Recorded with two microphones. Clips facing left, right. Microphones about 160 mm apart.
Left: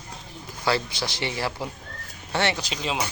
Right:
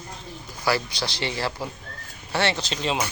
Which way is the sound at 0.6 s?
20° left (ahead or behind).